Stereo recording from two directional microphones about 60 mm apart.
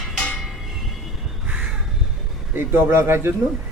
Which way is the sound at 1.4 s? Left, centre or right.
Centre.